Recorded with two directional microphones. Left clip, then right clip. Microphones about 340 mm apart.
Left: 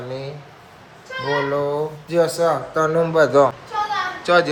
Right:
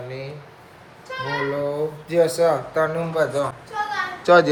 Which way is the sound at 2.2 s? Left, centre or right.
Left.